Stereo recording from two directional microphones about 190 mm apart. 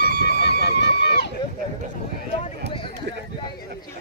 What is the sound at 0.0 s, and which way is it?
Horse, 60° left (ahead or behind).